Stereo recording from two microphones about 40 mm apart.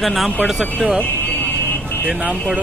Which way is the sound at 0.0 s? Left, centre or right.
Centre.